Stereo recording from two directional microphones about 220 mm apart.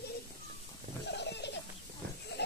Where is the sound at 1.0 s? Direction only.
50° left (ahead or behind).